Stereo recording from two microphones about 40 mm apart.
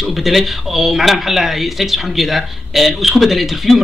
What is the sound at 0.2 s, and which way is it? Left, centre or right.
Speech, centre.